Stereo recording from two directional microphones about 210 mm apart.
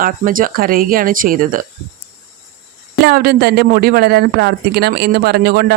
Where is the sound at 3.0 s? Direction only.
45° right (ahead or behind).